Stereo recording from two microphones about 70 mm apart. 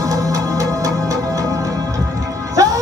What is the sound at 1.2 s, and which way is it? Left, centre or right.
Music, right.